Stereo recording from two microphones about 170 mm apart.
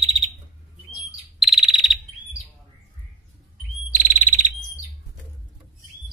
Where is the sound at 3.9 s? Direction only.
45° right (ahead or behind).